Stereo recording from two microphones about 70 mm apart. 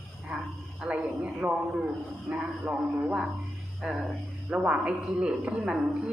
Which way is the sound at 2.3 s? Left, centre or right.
Centre.